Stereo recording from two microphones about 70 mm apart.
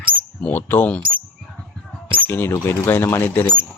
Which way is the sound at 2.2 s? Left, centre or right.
Left.